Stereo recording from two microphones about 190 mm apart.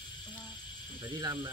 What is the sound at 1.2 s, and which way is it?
Speech, 20° right (ahead or behind).